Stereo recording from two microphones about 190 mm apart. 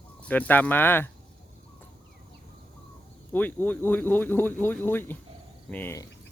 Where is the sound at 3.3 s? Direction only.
10° left (ahead or behind).